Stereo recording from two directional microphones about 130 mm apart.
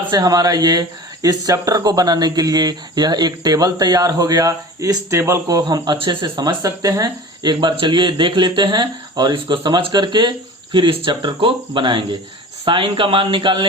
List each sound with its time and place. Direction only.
0.1 s speech: 30° right (ahead or behind)